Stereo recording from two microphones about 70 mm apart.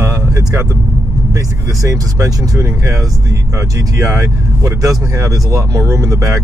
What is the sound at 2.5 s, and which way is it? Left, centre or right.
Speech, right.